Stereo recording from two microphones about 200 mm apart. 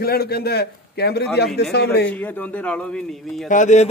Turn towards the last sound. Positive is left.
turn(degrees=35)  # may be behind; listen again after turning